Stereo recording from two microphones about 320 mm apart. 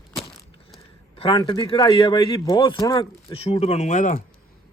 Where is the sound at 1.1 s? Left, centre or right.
Centre.